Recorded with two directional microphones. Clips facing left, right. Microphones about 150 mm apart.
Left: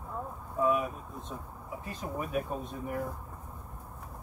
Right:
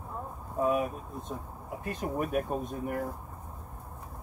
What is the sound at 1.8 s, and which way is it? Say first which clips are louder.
Speech: right 5 dB; 60° right (ahead or behind).